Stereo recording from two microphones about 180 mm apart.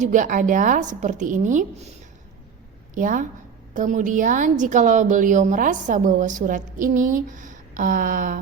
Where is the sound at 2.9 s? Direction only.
45° right (ahead or behind).